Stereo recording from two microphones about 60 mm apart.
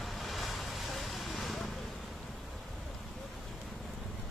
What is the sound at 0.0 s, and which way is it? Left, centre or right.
Vehicle, centre.